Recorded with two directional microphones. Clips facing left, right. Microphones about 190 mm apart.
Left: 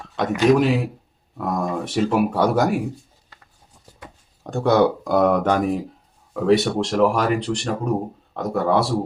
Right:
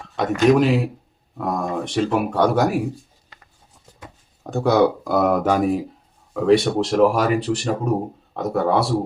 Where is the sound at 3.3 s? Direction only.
20° right (ahead or behind).